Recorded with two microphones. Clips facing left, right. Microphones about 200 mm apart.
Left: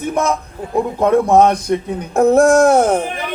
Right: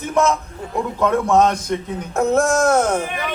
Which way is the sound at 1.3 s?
60° left (ahead or behind).